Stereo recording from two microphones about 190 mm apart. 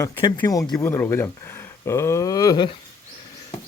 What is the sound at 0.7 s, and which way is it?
Speech, 10° left (ahead or behind).